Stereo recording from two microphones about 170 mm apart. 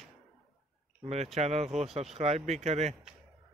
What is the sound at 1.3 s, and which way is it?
Speech, 40° right (ahead or behind).